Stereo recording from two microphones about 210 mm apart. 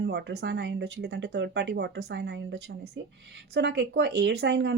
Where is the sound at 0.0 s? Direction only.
55° right (ahead or behind).